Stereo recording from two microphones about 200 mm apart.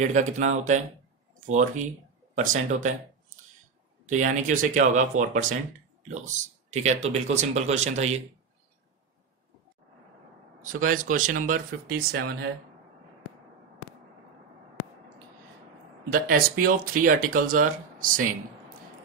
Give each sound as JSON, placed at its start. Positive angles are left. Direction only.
{"t": 0.1, "sound": "speech", "side_deg": -35}
{"t": 4.1, "sound": "speech", "side_deg": -40}
{"t": 10.6, "sound": "speech", "side_deg": -45}
{"t": 16.1, "sound": "speech", "side_deg": -45}